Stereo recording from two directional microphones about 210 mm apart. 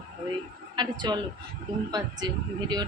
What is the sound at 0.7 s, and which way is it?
Speech, 20° right (ahead or behind).